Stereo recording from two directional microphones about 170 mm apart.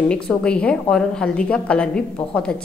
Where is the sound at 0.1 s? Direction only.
5° left (ahead or behind).